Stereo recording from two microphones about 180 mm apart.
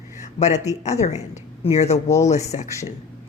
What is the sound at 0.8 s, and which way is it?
Speech, 40° left (ahead or behind).